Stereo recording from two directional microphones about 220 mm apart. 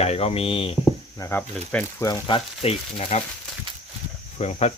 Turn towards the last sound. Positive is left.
turn(degrees=30)  # may be behind; listen again after turning